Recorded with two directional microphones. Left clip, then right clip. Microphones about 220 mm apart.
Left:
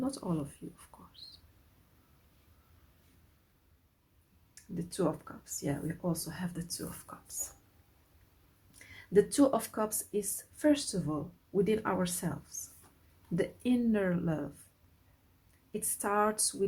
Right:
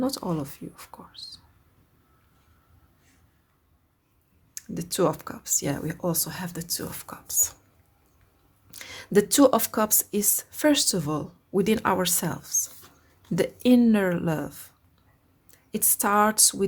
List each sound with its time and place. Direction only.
0.0 s speech: 35° right (ahead or behind)
4.5 s speech: 40° right (ahead or behind)
8.9 s speech: 40° right (ahead or behind)
15.7 s speech: 40° right (ahead or behind)